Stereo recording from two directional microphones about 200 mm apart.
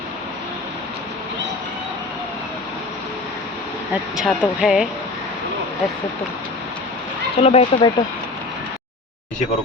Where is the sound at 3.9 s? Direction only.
5° right (ahead or behind).